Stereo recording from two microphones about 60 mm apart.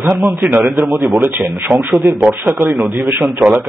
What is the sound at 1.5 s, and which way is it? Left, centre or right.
Speech, right.